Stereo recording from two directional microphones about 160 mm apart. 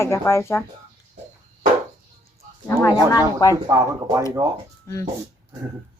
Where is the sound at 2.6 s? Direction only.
15° left (ahead or behind).